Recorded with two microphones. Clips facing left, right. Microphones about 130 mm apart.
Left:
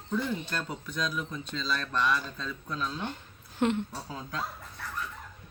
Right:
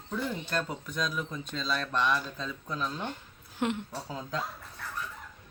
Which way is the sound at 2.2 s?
15° right (ahead or behind).